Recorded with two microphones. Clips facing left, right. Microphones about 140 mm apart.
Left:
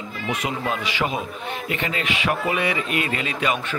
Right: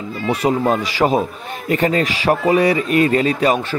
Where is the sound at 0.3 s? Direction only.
35° right (ahead or behind).